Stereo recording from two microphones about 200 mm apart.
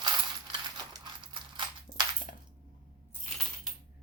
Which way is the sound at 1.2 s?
25° right (ahead or behind).